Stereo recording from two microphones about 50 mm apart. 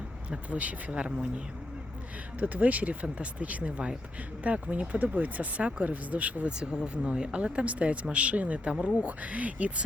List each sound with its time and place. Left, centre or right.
0.3 s speech: right
2.4 s speech: right
6.6 s speech: centre